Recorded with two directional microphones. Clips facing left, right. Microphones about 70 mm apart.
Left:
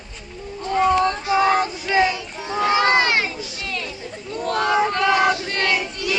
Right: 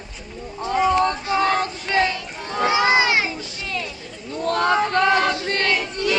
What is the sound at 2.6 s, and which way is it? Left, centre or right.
Crowd, centre.